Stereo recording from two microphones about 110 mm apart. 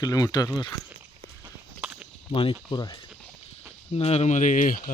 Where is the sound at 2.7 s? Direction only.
40° left (ahead or behind).